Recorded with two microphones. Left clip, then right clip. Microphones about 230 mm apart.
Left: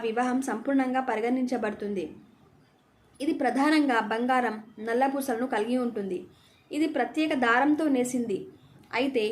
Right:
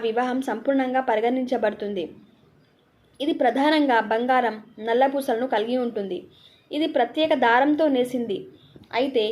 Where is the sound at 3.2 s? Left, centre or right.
Centre.